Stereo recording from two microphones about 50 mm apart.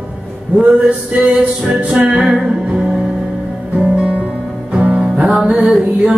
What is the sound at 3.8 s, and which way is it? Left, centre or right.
Music, right.